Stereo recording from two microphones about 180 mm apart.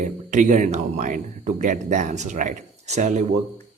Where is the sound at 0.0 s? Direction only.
45° right (ahead or behind).